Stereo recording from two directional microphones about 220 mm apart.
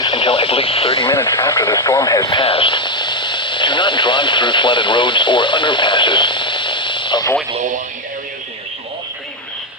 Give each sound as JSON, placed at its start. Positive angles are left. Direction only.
{"t": 0.0, "sound": "radio", "side_deg": 20}
{"t": 1.1, "sound": "speech", "side_deg": 10}